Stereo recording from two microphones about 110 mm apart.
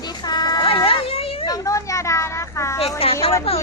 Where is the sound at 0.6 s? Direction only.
55° left (ahead or behind).